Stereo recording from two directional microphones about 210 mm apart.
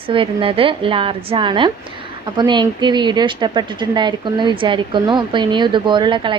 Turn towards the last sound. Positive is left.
turn(degrees=-20)  # may be behind; listen again after turning